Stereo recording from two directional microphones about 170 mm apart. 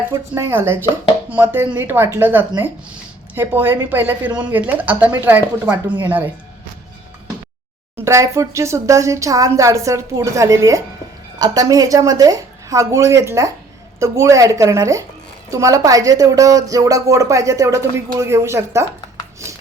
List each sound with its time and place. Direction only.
0.1 s speech: 15° right (ahead or behind)
7.9 s speech: 15° right (ahead or behind)